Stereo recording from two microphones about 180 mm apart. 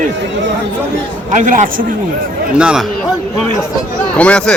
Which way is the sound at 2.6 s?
5° right (ahead or behind).